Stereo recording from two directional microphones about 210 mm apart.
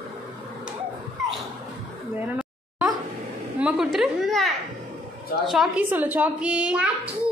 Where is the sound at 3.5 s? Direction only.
5° right (ahead or behind).